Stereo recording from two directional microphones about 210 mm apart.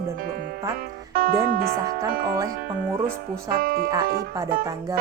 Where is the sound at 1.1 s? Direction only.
45° right (ahead or behind).